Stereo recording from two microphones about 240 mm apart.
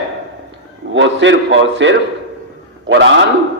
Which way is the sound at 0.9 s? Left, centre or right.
Right.